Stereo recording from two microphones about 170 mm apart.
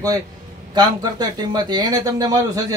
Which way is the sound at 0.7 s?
25° right (ahead or behind).